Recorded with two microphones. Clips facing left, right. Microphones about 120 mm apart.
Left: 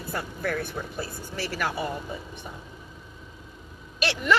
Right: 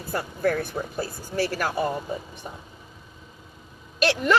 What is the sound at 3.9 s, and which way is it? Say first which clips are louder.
Speech: right 3 dB; 45° right (ahead or behind).